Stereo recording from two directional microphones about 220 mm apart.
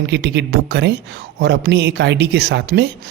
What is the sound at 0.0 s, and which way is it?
Speech, 50° right (ahead or behind).